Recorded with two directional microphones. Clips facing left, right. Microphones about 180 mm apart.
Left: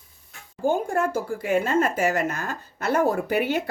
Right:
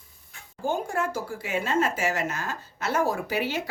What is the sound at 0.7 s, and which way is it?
A woman's voice, 55° left (ahead or behind).